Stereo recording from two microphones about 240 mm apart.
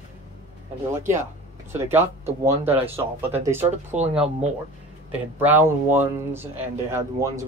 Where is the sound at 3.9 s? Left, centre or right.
Right.